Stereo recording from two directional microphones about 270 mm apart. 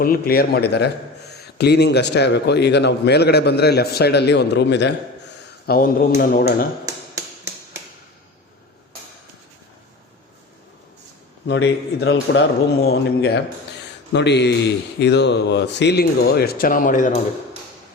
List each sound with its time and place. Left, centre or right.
0.0 s speech: left
6.8 s tap: centre
11.4 s speech: left